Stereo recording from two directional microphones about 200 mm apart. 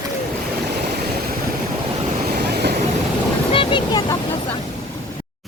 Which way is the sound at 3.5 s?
20° left (ahead or behind).